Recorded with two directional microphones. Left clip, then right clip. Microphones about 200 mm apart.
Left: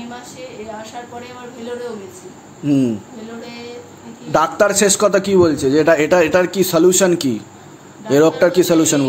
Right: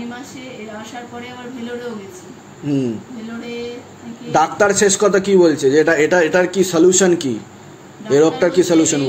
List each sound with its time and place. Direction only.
2.6 s a man's voice: 40° left (ahead or behind)
4.3 s a man's voice: 35° left (ahead or behind)